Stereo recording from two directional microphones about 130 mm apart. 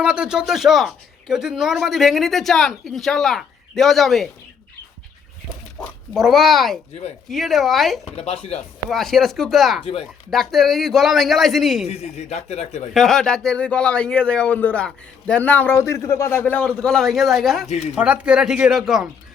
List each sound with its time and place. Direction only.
0.0 s speech: 5° right (ahead or behind)
5.8 s cat: 10° left (ahead or behind)
6.1 s speech: centre (ahead or behind)
8.0 s speech: 50° left (ahead or behind)
8.9 s speech: centre (ahead or behind)
11.9 s a man's voice: 50° left (ahead or behind)
12.9 s a man's voice: centre (ahead or behind)